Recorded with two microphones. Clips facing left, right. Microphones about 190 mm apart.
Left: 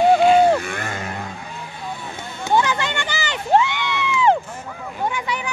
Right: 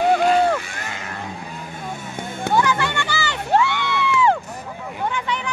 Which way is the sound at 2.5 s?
20° left (ahead or behind).